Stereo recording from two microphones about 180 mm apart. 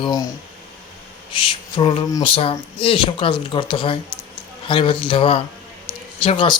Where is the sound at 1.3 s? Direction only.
30° left (ahead or behind).